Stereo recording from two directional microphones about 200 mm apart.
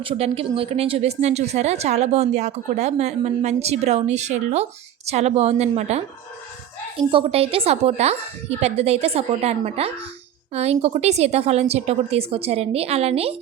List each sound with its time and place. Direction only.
0.0 s speech: 25° right (ahead or behind)
7.0 s speech: 25° right (ahead or behind)